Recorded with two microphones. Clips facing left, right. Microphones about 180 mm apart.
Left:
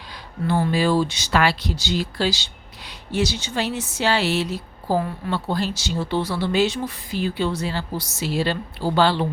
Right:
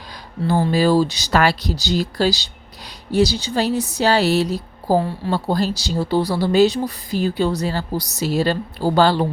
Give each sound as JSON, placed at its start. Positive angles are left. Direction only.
{"t": 0.7, "sound": "speech", "side_deg": -40}